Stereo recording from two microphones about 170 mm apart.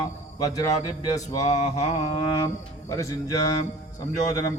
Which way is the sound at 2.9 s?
20° left (ahead or behind).